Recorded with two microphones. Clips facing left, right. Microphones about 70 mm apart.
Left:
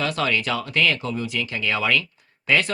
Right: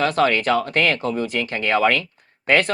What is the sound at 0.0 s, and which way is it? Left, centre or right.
Speech, right.